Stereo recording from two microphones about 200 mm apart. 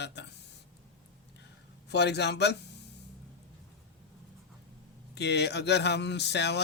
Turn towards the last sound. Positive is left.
turn(degrees=60)  # may be behind; listen again after turning